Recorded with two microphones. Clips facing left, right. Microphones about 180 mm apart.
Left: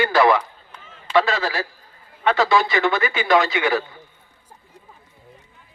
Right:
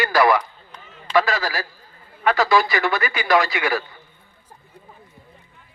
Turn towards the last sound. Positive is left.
turn(degrees=25)  # may be behind; listen again after turning